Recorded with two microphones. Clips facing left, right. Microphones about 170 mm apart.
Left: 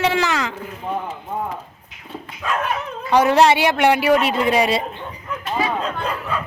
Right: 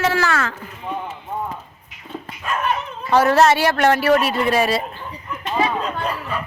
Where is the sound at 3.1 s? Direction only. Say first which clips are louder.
Even; 15° left (ahead or behind).